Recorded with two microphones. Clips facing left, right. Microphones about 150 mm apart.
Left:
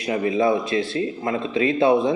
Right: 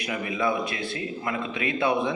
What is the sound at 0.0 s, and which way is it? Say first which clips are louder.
A man's voice: left 7 dB; 30° left (ahead or behind).